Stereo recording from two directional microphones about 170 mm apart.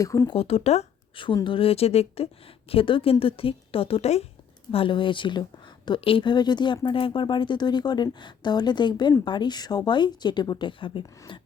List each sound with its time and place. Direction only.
0.0 s a woman's voice: 20° left (ahead or behind)
0.3 s a woman's voice: 35° left (ahead or behind)